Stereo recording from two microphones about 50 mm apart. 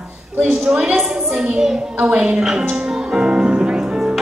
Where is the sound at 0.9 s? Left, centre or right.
Centre.